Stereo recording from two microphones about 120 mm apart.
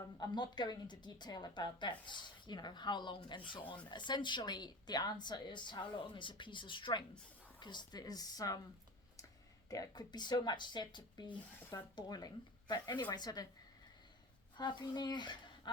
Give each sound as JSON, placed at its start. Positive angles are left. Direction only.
{"t": 0.2, "sound": "speech", "side_deg": 40}
{"t": 9.6, "sound": "speech", "side_deg": 30}
{"t": 14.5, "sound": "a woman's voice", "side_deg": 40}